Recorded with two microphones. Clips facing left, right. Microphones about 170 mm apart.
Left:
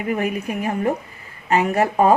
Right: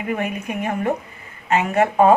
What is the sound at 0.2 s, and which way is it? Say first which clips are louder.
A woman's voice: left 2 dB; 35° left (ahead or behind).